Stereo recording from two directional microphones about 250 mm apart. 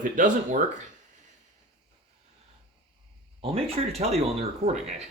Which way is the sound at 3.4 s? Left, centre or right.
Right.